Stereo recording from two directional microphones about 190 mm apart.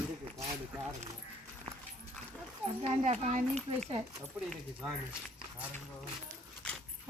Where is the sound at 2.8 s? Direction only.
40° right (ahead or behind).